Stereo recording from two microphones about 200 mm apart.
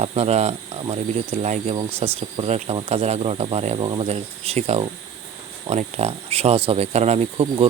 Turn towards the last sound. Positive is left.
turn(degrees=-30)  # may be behind; listen again after turning